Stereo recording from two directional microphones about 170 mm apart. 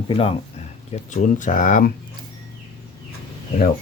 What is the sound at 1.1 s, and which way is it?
Speech, 45° left (ahead or behind).